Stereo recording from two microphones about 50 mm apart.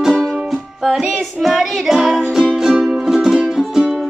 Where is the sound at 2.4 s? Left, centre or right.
Centre.